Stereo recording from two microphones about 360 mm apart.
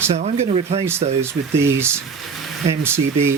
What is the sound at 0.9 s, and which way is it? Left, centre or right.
Speech, centre.